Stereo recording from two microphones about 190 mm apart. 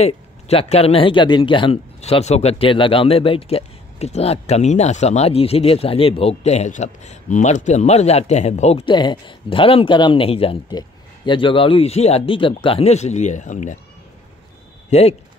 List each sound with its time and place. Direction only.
0.0 s speech: 30° left (ahead or behind)
14.9 s speech: 35° left (ahead or behind)